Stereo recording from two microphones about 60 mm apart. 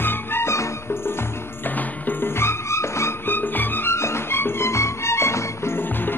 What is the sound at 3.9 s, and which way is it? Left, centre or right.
Music, left.